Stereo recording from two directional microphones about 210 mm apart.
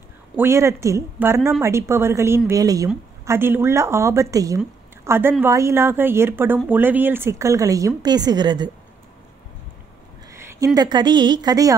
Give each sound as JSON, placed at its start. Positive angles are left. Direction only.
{"t": 0.4, "sound": "a woman's voice", "side_deg": -10}
{"t": 10.3, "sound": "a woman's voice", "side_deg": -10}